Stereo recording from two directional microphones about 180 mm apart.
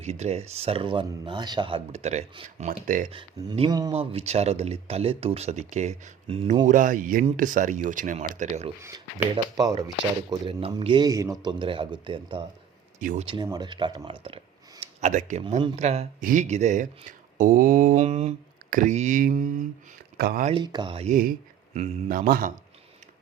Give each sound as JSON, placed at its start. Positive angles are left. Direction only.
{"t": 0.0, "sound": "speech", "side_deg": -40}
{"t": 3.1, "sound": "speech", "side_deg": -30}
{"t": 4.1, "sound": "speech", "side_deg": -35}
{"t": 6.7, "sound": "speech", "side_deg": -45}
{"t": 9.3, "sound": "speech", "side_deg": -20}
{"t": 13.0, "sound": "speech", "side_deg": -50}
{"t": 13.2, "sound": "speech", "side_deg": -25}
{"t": 20.1, "sound": "speech", "side_deg": -65}
{"t": 20.4, "sound": "speech", "side_deg": -30}
{"t": 21.1, "sound": "speech", "side_deg": -50}